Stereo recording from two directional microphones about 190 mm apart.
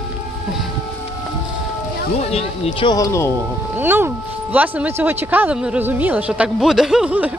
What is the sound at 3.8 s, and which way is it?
Speech, 10° right (ahead or behind).